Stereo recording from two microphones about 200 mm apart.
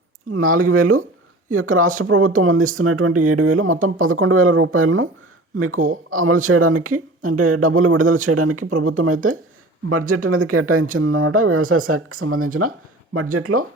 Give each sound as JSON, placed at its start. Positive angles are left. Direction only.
{"t": 0.3, "sound": "speech", "side_deg": -90}
{"t": 1.6, "sound": "speech", "side_deg": -40}
{"t": 2.0, "sound": "speech", "side_deg": -90}
{"t": 8.0, "sound": "speech", "side_deg": -40}
{"t": 8.3, "sound": "speech", "side_deg": -90}